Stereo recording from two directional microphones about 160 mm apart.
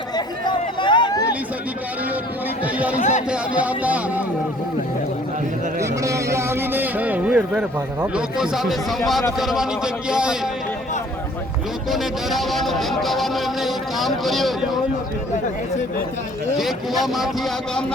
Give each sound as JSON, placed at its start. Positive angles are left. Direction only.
{"t": 0.4, "sound": "a sound", "side_deg": 30}
{"t": 3.0, "sound": "speech", "side_deg": 45}
{"t": 3.2, "sound": "speech", "side_deg": -10}
{"t": 5.8, "sound": "a man's voice", "side_deg": -20}
{"t": 11.9, "sound": "speech", "side_deg": 0}
{"t": 16.6, "sound": "speech", "side_deg": 0}